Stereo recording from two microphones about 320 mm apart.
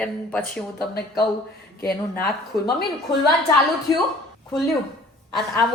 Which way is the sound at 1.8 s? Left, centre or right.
Left.